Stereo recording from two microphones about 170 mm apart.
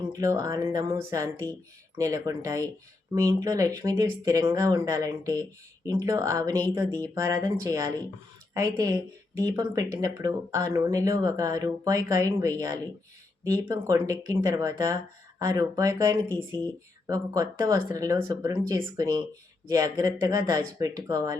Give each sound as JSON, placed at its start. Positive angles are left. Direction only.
{"t": 0.1, "sound": "speech", "side_deg": -20}